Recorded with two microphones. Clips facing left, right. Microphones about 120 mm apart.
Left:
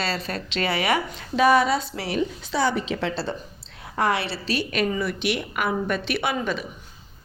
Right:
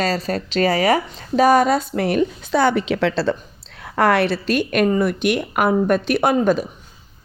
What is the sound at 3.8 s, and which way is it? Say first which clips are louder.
A woman's voice: right 7 dB; 65° right (ahead or behind).